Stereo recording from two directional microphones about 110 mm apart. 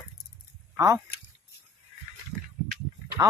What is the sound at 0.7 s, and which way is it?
Speech, 30° right (ahead or behind).